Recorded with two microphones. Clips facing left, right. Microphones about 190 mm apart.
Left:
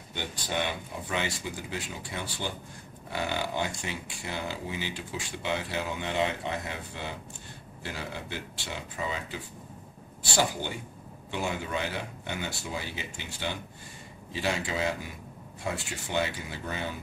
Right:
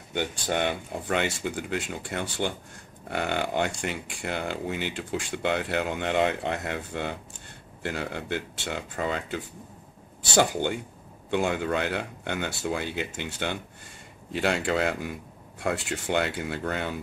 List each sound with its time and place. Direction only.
0.1 s speech: 55° right (ahead or behind)